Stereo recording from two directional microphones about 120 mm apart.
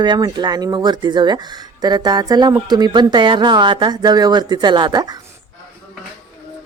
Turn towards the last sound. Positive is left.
turn(degrees=-35)  # may be behind; listen again after turning